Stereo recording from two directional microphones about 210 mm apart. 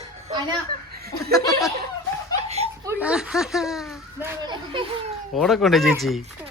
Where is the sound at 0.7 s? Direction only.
45° right (ahead or behind).